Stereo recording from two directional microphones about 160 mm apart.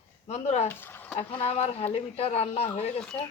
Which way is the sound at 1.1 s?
40° left (ahead or behind).